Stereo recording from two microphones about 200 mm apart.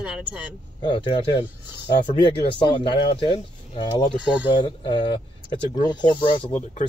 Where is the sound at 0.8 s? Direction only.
25° left (ahead or behind).